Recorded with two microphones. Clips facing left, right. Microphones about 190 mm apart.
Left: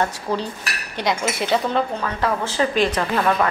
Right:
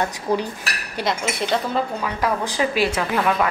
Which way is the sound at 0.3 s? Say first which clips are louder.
Right 5 dB; 15° right (ahead or behind).